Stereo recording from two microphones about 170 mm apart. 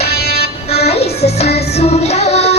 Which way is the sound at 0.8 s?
35° left (ahead or behind).